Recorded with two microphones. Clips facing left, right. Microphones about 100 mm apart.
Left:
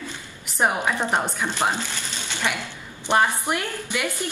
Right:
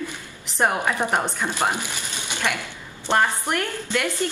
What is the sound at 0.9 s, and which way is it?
Speech, 10° right (ahead or behind).